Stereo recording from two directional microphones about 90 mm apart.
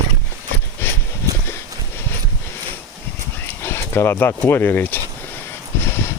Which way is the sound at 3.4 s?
25° left (ahead or behind).